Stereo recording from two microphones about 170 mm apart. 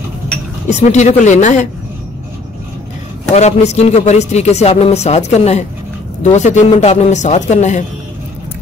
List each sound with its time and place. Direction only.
0.7 s speech: 45° left (ahead or behind)
3.3 s a man's voice: 40° left (ahead or behind)